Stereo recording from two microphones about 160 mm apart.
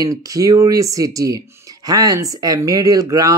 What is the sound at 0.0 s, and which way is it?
Speech, 20° right (ahead or behind).